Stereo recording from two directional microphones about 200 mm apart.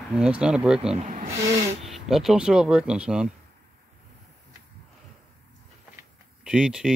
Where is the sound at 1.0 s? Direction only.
40° right (ahead or behind).